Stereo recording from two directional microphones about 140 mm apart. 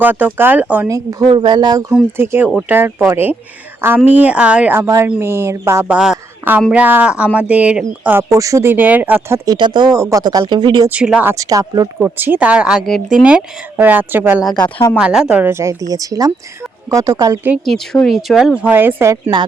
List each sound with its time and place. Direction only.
0.0 s speech: 10° right (ahead or behind)
0.9 s speech: 25° right (ahead or behind)
1.9 s speech: 15° right (ahead or behind)
8.3 s speech: 20° right (ahead or behind)
9.5 s speech: 30° right (ahead or behind)
10.8 s speech: 10° right (ahead or behind)
11.3 s speech: 25° right (ahead or behind)
11.9 s speech: 15° right (ahead or behind)
15.4 s speech: 20° right (ahead or behind)
18.0 s speech: centre (ahead or behind); by 19.3 s 20° right (ahead or behind)